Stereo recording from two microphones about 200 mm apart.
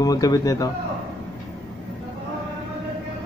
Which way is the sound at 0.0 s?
20° left (ahead or behind).